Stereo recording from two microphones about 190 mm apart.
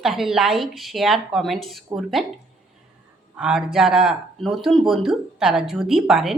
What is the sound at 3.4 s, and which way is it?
Speech, 5° right (ahead or behind).